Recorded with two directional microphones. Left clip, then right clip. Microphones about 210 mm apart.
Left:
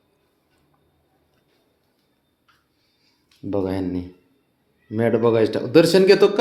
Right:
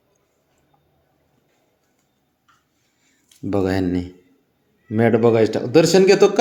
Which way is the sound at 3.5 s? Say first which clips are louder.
Right 4 dB; 20° right (ahead or behind).